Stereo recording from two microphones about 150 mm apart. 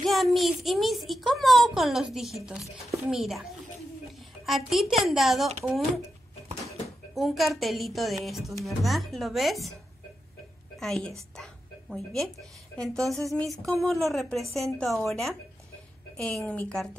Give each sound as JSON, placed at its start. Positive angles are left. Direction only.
{"t": 0.0, "sound": "speech", "side_deg": 0}
{"t": 4.5, "sound": "speech", "side_deg": 0}
{"t": 7.2, "sound": "speech", "side_deg": 0}
{"t": 10.8, "sound": "a woman's voice", "side_deg": 5}